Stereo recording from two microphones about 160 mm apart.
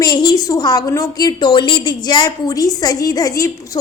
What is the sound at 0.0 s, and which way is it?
A woman's voice, 25° left (ahead or behind).